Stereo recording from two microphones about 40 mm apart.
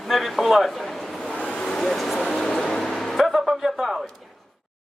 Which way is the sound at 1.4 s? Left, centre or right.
Left.